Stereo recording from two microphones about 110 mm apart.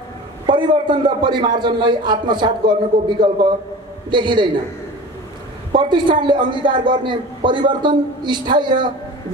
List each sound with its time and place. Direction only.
0.5 s a man's voice: 45° right (ahead or behind)
5.8 s a man's voice: 45° right (ahead or behind)